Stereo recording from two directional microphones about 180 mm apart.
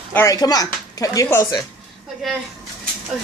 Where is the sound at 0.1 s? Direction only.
15° left (ahead or behind).